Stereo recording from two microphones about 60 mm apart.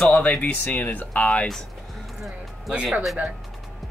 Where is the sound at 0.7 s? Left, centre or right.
Left.